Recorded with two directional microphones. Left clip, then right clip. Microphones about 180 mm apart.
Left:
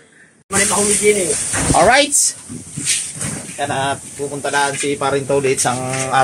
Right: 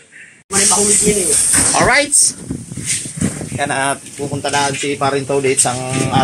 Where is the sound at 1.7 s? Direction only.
30° left (ahead or behind).